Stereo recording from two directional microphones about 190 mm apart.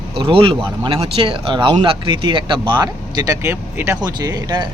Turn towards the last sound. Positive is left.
turn(degrees=-20)  # may be behind; listen again after turning